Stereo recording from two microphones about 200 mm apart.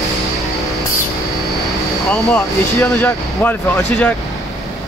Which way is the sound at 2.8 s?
10° left (ahead or behind).